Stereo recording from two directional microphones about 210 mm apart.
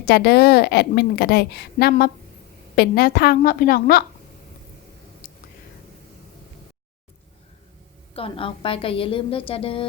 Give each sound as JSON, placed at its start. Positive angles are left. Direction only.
{"t": 0.0, "sound": "a woman's voice", "side_deg": 50}
{"t": 8.1, "sound": "a woman's voice", "side_deg": 25}